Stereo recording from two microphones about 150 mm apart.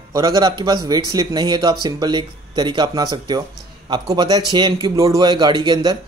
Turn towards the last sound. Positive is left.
turn(degrees=-25)  # may be behind; listen again after turning